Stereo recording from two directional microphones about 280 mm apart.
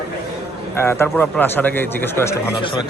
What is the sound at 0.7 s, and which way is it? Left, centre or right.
A man's voice, centre.